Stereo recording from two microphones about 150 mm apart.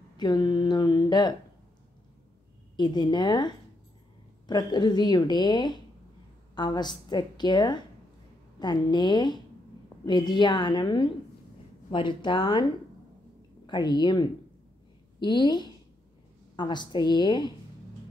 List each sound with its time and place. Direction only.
0.2 s a sound: 25° left (ahead or behind)
2.7 s a woman's voice: 30° left (ahead or behind)
13.7 s a woman's voice: 30° left (ahead or behind)